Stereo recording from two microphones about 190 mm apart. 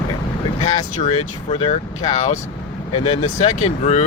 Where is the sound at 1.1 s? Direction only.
30° left (ahead or behind).